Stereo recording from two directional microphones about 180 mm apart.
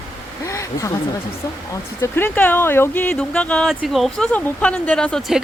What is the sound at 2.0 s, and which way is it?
Speech, 10° left (ahead or behind).